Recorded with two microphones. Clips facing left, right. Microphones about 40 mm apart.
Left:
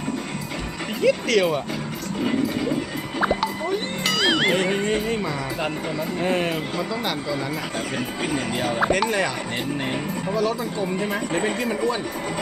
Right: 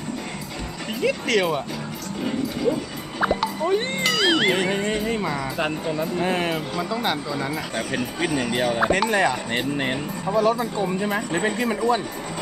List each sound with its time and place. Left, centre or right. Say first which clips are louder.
1.0 s speech: left 2 dB; centre
3.2 s music: even; centre
4.0 s speech: left 1 dB; centre
5.2 s speech: right 1 dB; centre
8.8 s speech: right 1 dB; centre
10.8 s speech: right 1 dB; centre